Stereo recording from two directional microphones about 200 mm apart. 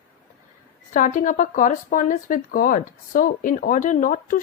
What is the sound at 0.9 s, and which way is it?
Speech, 40° left (ahead or behind).